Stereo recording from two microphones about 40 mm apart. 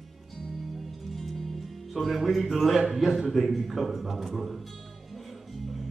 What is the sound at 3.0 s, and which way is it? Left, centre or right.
A man's voice, centre.